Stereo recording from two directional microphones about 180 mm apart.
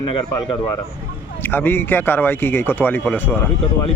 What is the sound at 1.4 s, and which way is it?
Speech, 10° left (ahead or behind).